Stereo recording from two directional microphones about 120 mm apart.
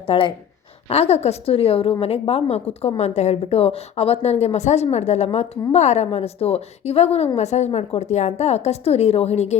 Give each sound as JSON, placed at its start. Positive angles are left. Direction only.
{"t": 0.0, "sound": "a woman's voice", "side_deg": 50}